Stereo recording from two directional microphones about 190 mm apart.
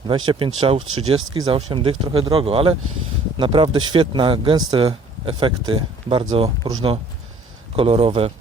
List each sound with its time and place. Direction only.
0.3 s speech: 25° right (ahead or behind)
7.8 s speech: 30° right (ahead or behind)